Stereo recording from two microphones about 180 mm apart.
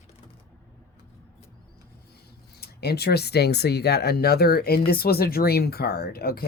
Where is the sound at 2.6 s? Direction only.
60° left (ahead or behind).